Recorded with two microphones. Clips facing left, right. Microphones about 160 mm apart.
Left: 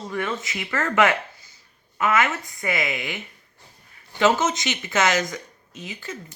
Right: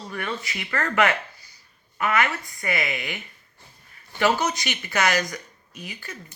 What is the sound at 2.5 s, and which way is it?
Speech, 20° left (ahead or behind).